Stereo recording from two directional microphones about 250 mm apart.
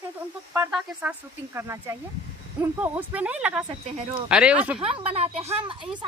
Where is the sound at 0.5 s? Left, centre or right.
Centre.